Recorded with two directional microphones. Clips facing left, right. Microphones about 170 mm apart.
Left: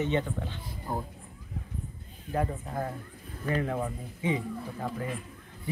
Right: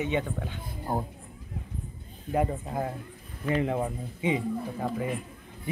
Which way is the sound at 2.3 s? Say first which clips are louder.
Right 3 dB; 20° right (ahead or behind).